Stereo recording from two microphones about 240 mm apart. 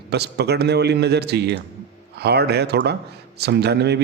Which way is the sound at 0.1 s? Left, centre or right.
Right.